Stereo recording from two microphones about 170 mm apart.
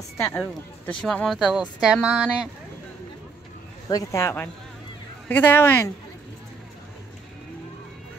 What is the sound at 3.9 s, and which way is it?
Speech, 20° left (ahead or behind).